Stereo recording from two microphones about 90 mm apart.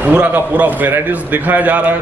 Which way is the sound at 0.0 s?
20° right (ahead or behind).